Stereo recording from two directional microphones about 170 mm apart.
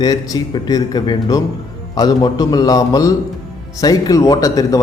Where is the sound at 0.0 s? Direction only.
25° left (ahead or behind).